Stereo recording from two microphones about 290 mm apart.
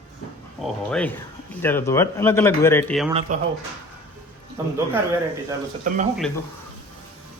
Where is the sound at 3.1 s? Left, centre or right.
Right.